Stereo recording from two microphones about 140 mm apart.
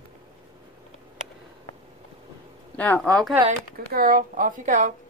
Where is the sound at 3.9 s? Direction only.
90° right; by 4.9 s 65° right (ahead or behind).